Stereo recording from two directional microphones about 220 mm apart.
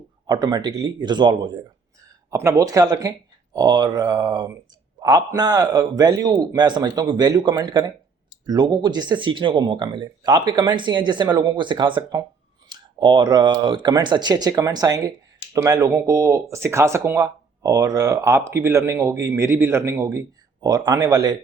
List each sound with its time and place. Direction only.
0.3 s speech: 20° right (ahead or behind)